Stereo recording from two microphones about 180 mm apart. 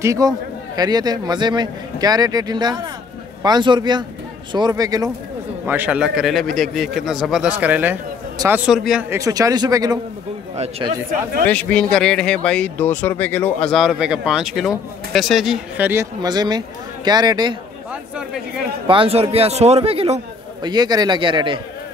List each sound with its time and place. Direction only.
0.0 s a man's voice: 15° right (ahead or behind)
5.7 s speech: 10° right (ahead or behind)
9.1 s speech: 20° right (ahead or behind)
10.5 s speech: 35° right (ahead or behind)
11.4 s speech: 5° left (ahead or behind)
15.9 s speech: 20° right (ahead or behind)
18.9 s speech: 30° right (ahead or behind)